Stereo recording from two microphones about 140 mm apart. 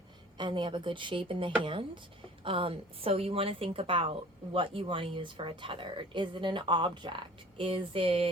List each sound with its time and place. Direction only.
0.3 s speech: 35° right (ahead or behind)